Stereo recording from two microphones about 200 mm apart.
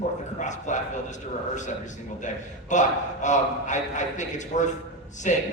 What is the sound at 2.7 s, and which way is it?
A man's voice, 35° left (ahead or behind).